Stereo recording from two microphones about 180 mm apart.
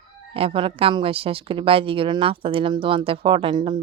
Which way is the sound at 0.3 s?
30° right (ahead or behind).